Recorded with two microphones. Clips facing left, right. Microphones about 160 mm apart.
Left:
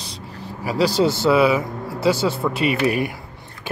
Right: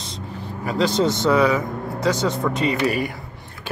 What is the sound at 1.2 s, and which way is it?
Speech, 5° left (ahead or behind).